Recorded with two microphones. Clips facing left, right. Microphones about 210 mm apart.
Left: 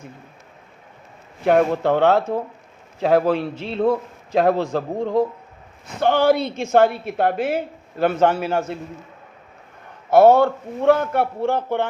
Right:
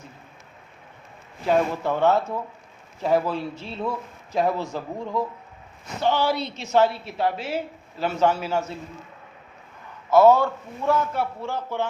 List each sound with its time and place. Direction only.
1.5 s speech: 60° left (ahead or behind)
3.7 s a man's voice: 55° left (ahead or behind)
4.4 s a woman's voice: 75° left (ahead or behind); by 8.7 s 55° left (ahead or behind)
10.1 s a man's voice: 60° left (ahead or behind)